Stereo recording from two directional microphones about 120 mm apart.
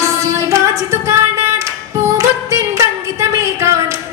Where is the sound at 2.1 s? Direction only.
25° right (ahead or behind).